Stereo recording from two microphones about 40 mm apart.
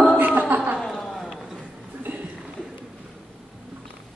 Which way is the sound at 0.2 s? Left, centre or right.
Right.